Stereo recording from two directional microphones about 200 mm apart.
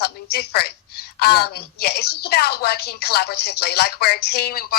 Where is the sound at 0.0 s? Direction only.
55° left (ahead or behind).